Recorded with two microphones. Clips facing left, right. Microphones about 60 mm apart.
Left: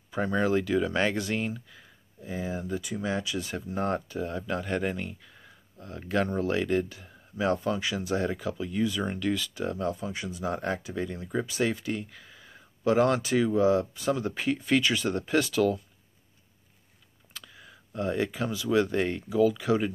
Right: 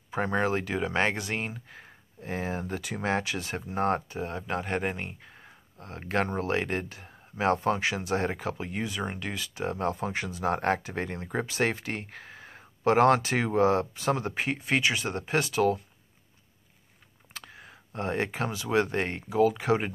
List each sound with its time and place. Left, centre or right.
0.1 s speech: right
9.8 s speech: right
17.3 s speech: right